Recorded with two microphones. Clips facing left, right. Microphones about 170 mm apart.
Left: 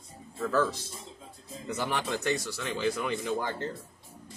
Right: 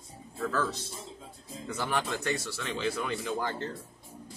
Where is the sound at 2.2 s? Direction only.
20° left (ahead or behind).